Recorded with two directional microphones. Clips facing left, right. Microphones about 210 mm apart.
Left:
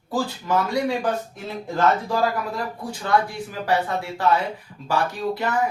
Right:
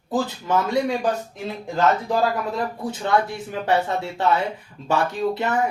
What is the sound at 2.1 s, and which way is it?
Speech, 20° right (ahead or behind).